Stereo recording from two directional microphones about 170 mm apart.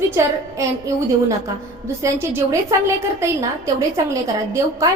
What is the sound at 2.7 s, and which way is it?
A woman's voice, 20° right (ahead or behind).